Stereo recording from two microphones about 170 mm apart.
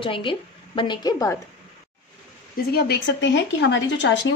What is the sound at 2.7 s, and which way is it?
A woman's voice, 70° left (ahead or behind).